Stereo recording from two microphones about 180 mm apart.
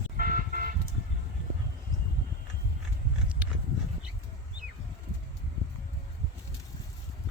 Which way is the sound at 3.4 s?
5° right (ahead or behind).